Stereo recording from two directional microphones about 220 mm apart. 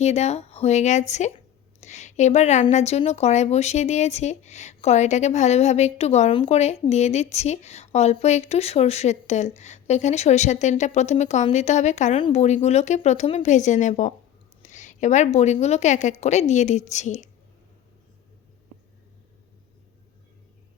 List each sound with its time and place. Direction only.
0.0 s a woman's voice: 30° left (ahead or behind)